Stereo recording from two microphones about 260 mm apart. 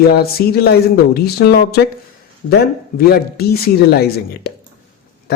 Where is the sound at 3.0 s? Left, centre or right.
Left.